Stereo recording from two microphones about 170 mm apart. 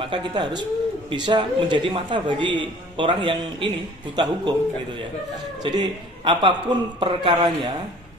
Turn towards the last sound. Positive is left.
turn(degrees=-35)  # may be behind; listen again after turning